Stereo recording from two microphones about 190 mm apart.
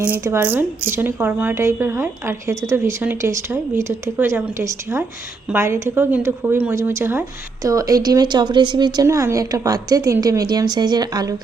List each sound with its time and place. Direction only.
0.0 s a woman's voice: 10° right (ahead or behind)